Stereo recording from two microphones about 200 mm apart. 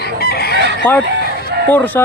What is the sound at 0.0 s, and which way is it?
Chicken, 50° left (ahead or behind).